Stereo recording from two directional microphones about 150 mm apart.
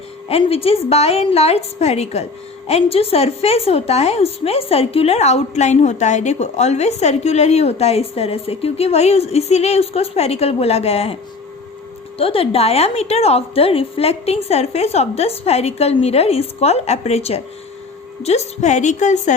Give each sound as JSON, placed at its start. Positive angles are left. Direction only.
{"t": 0.3, "sound": "a woman's voice", "side_deg": 40}